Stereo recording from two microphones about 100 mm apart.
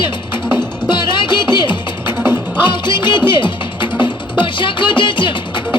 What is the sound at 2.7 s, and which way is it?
Music, 50° left (ahead or behind).